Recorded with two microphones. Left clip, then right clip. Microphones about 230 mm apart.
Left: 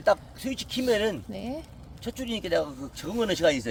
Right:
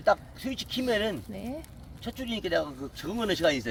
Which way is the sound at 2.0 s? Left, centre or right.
Left.